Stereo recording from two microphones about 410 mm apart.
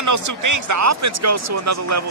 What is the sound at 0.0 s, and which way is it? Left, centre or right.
A man's voice, right.